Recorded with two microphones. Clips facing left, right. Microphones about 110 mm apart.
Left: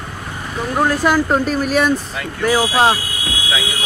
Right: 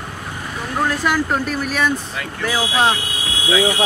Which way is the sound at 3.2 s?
20° right (ahead or behind).